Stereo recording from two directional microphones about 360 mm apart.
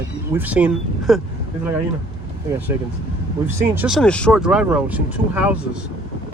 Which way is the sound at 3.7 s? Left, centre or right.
Centre.